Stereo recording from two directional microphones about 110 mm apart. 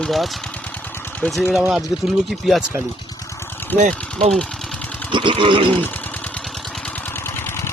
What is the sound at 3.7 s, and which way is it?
Speech, 15° left (ahead or behind).